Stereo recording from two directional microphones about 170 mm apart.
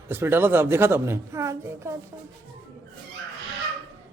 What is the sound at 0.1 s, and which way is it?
Speech, 15° right (ahead or behind).